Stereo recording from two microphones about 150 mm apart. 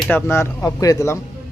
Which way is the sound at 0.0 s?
10° left (ahead or behind).